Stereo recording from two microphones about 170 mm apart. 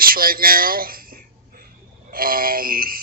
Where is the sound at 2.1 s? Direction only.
60° right (ahead or behind).